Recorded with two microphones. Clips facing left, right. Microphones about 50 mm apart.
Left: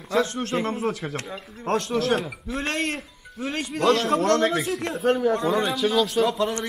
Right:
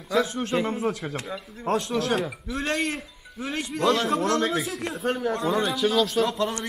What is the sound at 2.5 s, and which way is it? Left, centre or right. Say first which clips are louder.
Speech: even; left.